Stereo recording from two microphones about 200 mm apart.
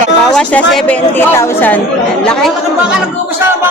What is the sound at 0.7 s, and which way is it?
A woman's voice, 5° left (ahead or behind).